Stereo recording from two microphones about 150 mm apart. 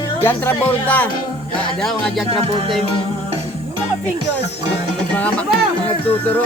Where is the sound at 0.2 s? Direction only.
15° left (ahead or behind).